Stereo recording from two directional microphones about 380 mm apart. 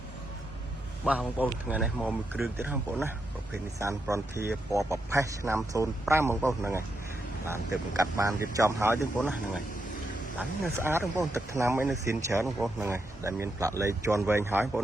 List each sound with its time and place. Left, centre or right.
1.0 s speech: centre
10.6 s speech: centre